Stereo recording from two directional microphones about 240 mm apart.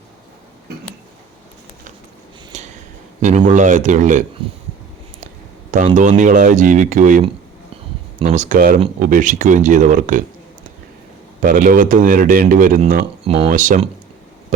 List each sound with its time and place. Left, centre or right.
2.5 s a sound: right
3.2 s speech: right
5.7 s speech: right
8.3 s speech: right
11.4 s speech: right